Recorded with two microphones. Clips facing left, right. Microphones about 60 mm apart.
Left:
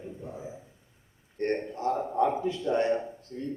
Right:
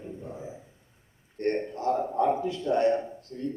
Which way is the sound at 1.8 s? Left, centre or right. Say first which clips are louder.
Right 1 dB; left.